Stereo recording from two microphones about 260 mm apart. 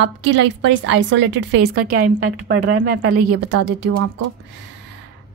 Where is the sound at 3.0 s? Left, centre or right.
Right.